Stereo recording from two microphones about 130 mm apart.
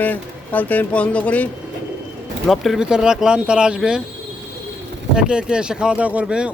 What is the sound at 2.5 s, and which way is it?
Speech, centre (ahead or behind).